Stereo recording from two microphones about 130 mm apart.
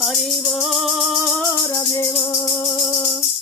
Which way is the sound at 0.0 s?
Centre (ahead or behind).